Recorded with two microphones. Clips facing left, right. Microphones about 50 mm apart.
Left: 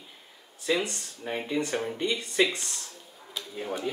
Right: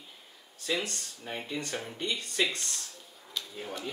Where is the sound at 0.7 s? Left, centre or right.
Centre.